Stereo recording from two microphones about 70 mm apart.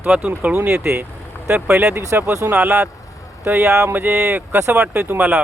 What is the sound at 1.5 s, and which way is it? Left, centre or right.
Speech, centre.